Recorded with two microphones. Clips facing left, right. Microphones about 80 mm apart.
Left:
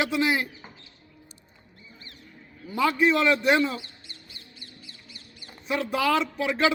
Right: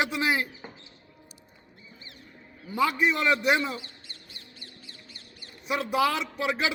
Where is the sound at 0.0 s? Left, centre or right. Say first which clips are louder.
Left 2 dB; right.